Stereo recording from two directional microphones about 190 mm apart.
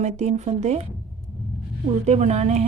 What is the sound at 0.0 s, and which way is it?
Speech, 35° right (ahead or behind).